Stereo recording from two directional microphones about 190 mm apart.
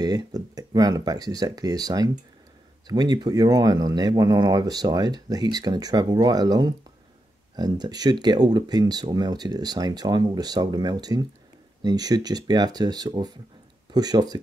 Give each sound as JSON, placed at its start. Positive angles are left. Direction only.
{"t": 0.0, "sound": "speech", "side_deg": -20}